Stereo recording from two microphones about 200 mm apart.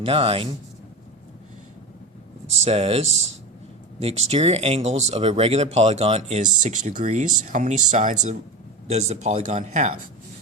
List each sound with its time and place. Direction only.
0.0 s speech: 30° right (ahead or behind)
2.6 s speech: 30° right (ahead or behind)
4.3 s speech: 30° right (ahead or behind)